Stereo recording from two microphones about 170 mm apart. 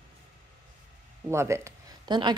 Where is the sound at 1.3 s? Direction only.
15° right (ahead or behind).